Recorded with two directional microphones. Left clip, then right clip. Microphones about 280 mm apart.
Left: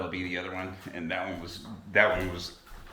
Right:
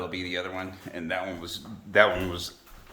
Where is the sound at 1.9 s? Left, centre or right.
Right.